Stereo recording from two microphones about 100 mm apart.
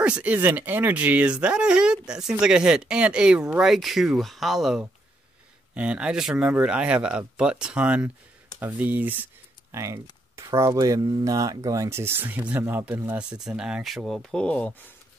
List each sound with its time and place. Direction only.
0.0 s speech: 10° right (ahead or behind)
9.8 s speech: 30° right (ahead or behind)
13.2 s speech: 5° right (ahead or behind); by 14.8 s 15° left (ahead or behind)